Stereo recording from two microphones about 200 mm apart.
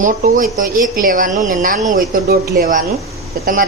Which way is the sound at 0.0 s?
40° right (ahead or behind).